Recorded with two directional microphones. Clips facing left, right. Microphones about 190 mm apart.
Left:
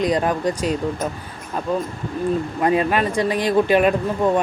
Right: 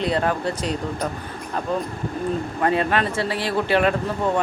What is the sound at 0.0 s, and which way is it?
Speech, 15° left (ahead or behind).